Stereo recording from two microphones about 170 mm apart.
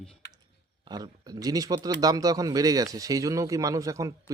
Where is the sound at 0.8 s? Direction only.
25° right (ahead or behind).